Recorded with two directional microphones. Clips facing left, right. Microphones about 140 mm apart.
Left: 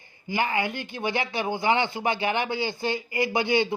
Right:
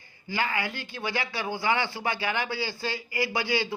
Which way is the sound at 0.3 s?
20° left (ahead or behind).